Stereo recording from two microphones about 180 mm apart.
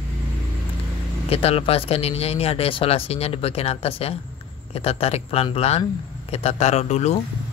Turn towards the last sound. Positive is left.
turn(degrees=40)  # may be behind; listen again after turning